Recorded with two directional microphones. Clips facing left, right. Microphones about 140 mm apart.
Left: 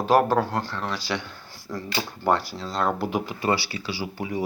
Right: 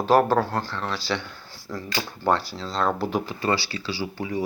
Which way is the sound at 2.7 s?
10° left (ahead or behind).